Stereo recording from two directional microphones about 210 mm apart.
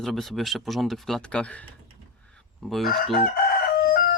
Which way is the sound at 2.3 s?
Centre (ahead or behind).